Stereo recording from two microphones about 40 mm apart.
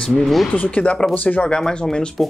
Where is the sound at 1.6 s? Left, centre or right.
Centre.